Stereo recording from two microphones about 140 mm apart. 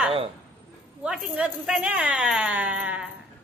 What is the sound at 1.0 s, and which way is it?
Speech, 5° right (ahead or behind).